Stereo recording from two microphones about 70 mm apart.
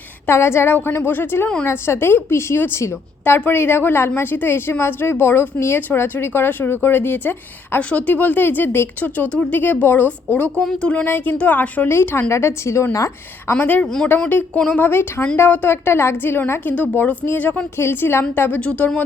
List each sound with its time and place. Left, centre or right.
0.3 s a woman's voice: left
7.8 s speech: centre
10.6 s speech: centre
10.8 s speech: left
11.9 s a woman's voice: left
13.5 s speech: left
13.8 s speech: centre
14.3 s a woman's voice: left
17.7 s a woman's voice: left